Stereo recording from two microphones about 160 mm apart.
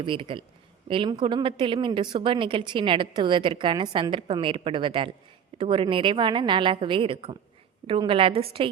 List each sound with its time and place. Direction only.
0.0 s speech: 30° right (ahead or behind)